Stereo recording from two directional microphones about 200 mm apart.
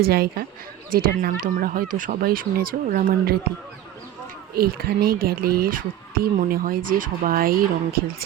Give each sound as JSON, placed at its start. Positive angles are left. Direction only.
{"t": 0.0, "sound": "a woman's voice", "side_deg": -50}
{"t": 4.5, "sound": "a woman's voice", "side_deg": -50}